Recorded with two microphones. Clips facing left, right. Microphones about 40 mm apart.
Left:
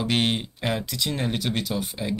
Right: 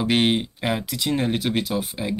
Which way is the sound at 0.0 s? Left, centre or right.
Centre.